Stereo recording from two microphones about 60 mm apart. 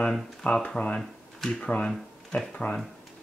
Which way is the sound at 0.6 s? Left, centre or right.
Left.